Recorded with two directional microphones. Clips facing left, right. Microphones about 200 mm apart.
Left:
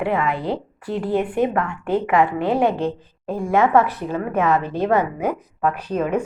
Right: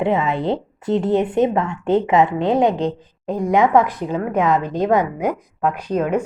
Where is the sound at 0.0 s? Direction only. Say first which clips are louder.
Right 3 dB; 20° right (ahead or behind).